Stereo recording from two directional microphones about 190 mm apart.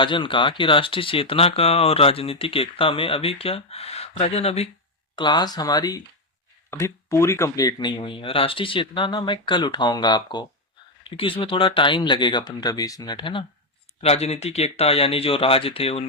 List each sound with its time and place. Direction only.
0.0 s speech: 25° left (ahead or behind)
5.1 s speech: 25° left (ahead or behind)